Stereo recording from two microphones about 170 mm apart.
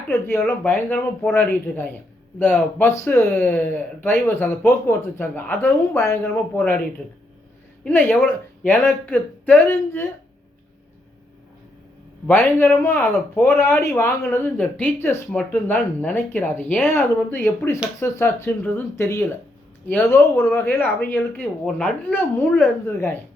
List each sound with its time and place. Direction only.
0.1 s speech: 15° left (ahead or behind)
7.9 s speech: 10° left (ahead or behind)
12.3 s speech: 10° left (ahead or behind)